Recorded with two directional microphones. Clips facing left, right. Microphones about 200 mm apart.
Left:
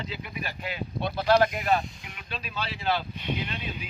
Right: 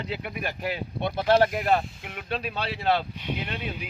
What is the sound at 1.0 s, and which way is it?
Speech, 25° right (ahead or behind).